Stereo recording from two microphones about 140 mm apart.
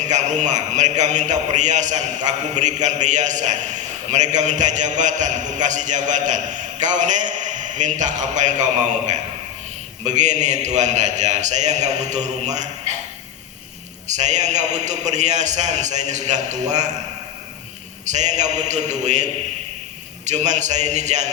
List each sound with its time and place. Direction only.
0.0 s a man's voice: 60° right (ahead or behind)
10.0 s a man's voice: 55° right (ahead or behind)
14.1 s a man's voice: 55° right (ahead or behind)
18.0 s a man's voice: 55° right (ahead or behind)